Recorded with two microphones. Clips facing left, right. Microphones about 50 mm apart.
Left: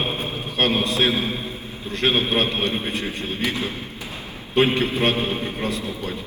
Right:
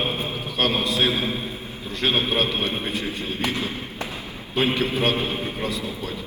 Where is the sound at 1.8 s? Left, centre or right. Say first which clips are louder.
Left 2 dB; left.